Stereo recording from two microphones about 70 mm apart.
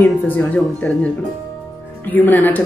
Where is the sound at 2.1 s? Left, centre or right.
Left.